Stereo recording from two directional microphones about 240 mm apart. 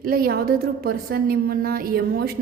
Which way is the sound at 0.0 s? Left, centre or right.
Right.